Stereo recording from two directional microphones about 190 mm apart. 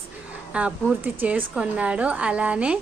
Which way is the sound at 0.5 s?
10° right (ahead or behind).